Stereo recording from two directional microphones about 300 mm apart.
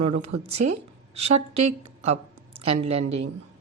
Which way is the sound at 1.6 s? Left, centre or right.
Right.